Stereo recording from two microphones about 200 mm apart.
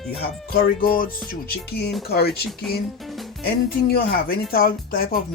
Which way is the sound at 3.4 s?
50° left (ahead or behind).